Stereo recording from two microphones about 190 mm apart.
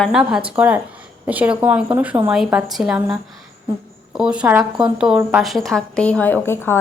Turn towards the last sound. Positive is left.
turn(degrees=10)  # may be behind; listen again after turning